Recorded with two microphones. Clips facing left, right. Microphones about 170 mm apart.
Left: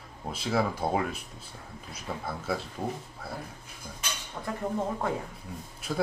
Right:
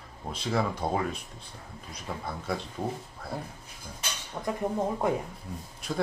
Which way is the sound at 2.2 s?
Centre (ahead or behind).